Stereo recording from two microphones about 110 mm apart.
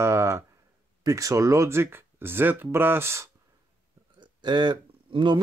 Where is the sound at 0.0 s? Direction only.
25° right (ahead or behind).